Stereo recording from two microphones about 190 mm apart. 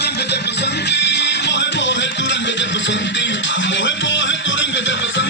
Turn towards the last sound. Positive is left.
turn(degrees=70)  # may be behind; listen again after turning